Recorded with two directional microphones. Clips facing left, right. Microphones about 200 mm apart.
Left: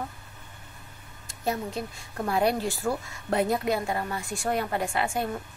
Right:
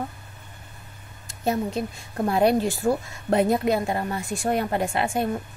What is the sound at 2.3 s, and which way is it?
Speech, 25° right (ahead or behind).